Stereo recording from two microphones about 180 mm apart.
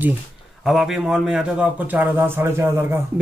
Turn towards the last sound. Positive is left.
turn(degrees=-15)  # may be behind; listen again after turning